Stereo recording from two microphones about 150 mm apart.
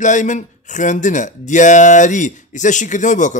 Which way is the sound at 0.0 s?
55° left (ahead or behind).